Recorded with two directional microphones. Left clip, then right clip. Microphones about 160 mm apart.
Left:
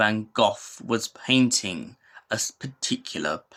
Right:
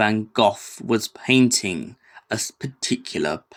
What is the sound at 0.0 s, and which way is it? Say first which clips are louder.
Speech: right 3 dB; 20° right (ahead or behind).